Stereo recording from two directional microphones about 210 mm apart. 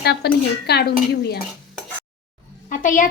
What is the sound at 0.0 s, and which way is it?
A woman's voice, 50° left (ahead or behind).